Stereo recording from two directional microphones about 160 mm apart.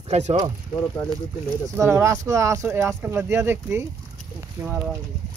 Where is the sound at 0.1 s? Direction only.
45° right (ahead or behind).